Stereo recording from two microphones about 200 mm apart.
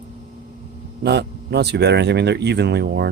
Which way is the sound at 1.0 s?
55° right (ahead or behind).